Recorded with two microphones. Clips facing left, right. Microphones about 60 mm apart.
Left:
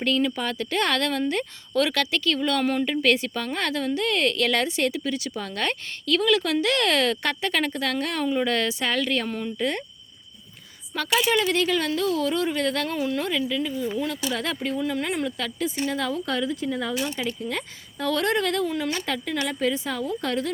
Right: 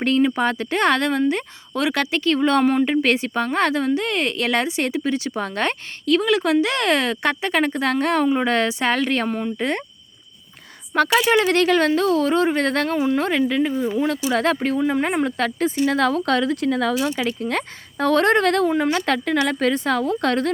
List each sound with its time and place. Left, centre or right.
0.0 s speech: right
10.9 s speech: right
13.8 s speech: right
14.3 s speech: right
17.4 s speech: right
18.7 s speech: right
18.9 s a woman's voice: right